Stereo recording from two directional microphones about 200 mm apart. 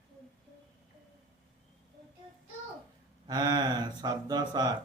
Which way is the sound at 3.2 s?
20° right (ahead or behind).